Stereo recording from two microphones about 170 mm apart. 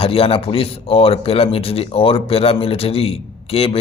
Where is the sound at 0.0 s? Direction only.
35° left (ahead or behind).